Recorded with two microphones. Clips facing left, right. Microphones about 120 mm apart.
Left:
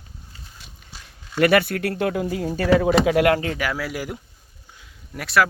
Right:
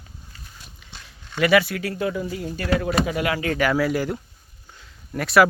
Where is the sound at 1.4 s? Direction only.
55° left (ahead or behind); by 3.3 s 80° left.